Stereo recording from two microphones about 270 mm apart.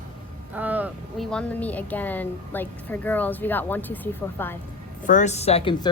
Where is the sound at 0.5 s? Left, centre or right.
Centre.